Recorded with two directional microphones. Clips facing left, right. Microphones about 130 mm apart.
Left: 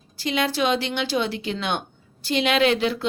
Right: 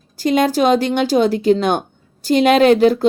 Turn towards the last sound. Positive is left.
turn(degrees=-45)  # may be behind; listen again after turning